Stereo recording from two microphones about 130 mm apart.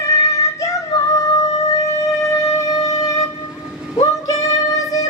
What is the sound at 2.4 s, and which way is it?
Music, 25° left (ahead or behind).